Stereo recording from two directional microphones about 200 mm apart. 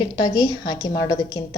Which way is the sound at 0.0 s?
20° left (ahead or behind).